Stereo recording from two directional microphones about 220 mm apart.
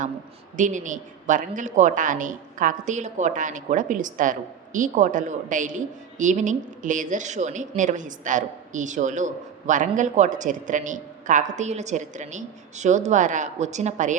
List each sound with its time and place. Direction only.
0.5 s a woman's voice: 35° right (ahead or behind)